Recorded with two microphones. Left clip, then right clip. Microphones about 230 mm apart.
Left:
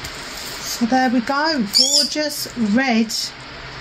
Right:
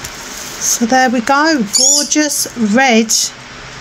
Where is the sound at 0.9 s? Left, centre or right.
Right.